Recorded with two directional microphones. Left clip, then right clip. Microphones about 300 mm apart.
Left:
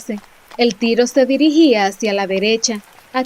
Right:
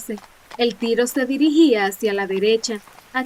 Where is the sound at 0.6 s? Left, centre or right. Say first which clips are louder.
Left 4 dB; centre.